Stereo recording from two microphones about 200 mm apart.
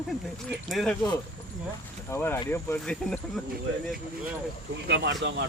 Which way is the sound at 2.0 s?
10° left (ahead or behind).